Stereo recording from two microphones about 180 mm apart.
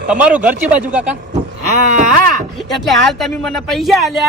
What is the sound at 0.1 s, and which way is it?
Speech, 5° right (ahead or behind).